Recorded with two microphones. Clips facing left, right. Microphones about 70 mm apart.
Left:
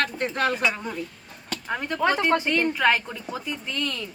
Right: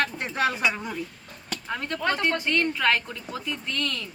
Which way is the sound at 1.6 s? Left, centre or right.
Centre.